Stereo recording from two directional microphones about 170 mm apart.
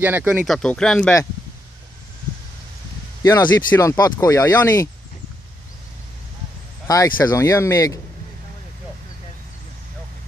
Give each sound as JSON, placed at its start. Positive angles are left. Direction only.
{"t": 0.0, "sound": "speech", "side_deg": -10}
{"t": 0.5, "sound": "speech", "side_deg": 5}
{"t": 3.2, "sound": "speech", "side_deg": 20}
{"t": 6.9, "sound": "speech", "side_deg": 20}